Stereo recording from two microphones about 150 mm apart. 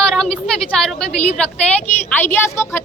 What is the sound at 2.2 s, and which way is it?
Speech, 15° left (ahead or behind).